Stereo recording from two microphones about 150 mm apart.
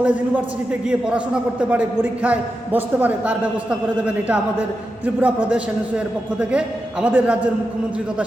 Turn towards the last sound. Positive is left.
turn(degrees=-10)  # may be behind; listen again after turning